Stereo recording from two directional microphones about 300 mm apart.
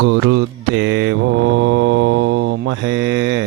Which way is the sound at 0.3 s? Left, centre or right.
Right.